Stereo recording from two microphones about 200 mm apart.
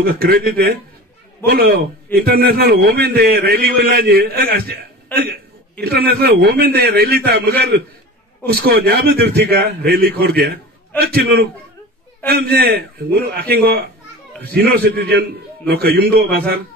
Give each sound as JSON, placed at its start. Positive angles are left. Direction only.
{"t": 0.0, "sound": "a man's voice", "side_deg": -50}